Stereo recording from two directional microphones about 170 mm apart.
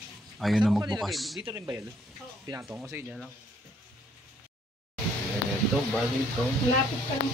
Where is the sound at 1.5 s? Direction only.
20° right (ahead or behind).